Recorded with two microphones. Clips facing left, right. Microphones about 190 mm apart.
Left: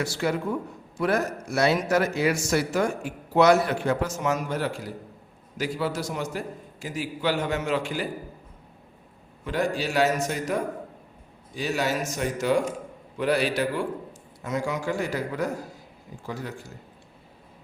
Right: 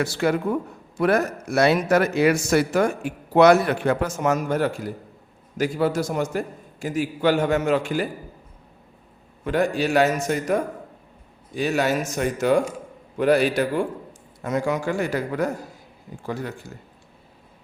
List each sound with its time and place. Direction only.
0.0 s a man's voice: 60° right (ahead or behind)
9.4 s a man's voice: 55° right (ahead or behind)